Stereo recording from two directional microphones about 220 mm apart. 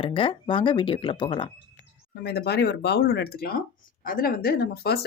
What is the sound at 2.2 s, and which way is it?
Speech, 45° left (ahead or behind).